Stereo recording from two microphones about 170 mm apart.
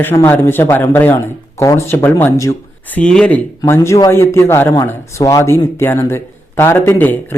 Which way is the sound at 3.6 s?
15° left (ahead or behind).